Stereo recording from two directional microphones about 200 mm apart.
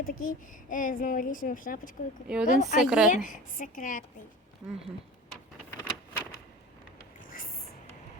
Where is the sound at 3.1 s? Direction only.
40° left (ahead or behind).